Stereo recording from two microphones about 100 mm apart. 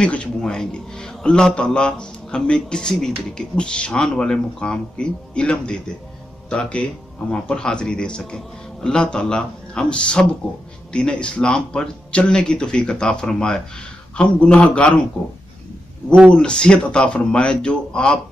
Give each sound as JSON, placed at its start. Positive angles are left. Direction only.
{"t": 0.0, "sound": "a man's voice", "side_deg": 10}
{"t": 16.3, "sound": "a man's voice", "side_deg": 10}